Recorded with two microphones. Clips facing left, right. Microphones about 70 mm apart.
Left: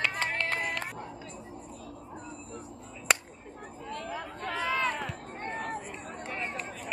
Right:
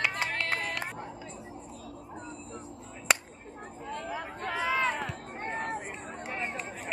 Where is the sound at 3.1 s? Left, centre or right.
Centre.